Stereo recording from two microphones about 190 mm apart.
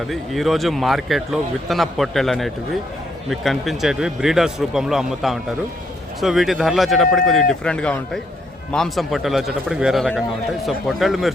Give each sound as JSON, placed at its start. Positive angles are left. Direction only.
{"t": 0.1, "sound": "a man's voice", "side_deg": 0}